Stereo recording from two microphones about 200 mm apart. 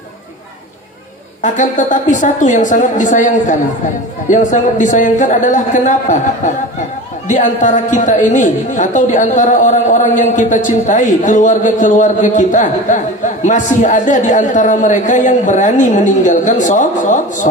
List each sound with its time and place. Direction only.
1.4 s a woman's voice: 40° left (ahead or behind)